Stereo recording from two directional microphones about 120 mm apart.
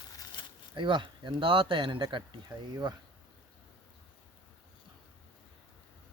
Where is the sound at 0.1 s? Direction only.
30° left (ahead or behind).